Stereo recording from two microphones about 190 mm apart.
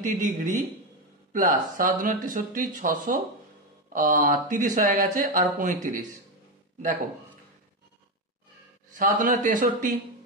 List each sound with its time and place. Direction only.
0.0 s speech: 40° right (ahead or behind)
8.9 s speech: 45° right (ahead or behind)